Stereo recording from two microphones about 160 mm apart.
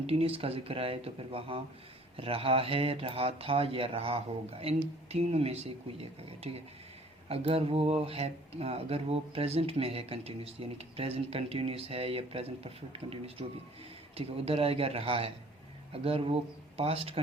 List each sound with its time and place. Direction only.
0.0 s speech: 35° right (ahead or behind)